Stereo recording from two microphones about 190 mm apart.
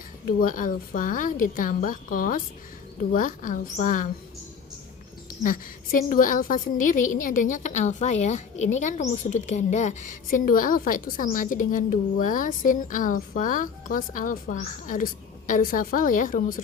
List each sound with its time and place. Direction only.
0.3 s a woman's voice: 45° left (ahead or behind)
6.1 s a woman's voice: 45° left (ahead or behind)